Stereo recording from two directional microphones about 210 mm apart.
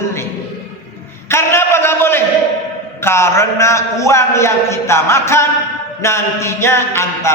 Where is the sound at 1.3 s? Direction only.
10° left (ahead or behind).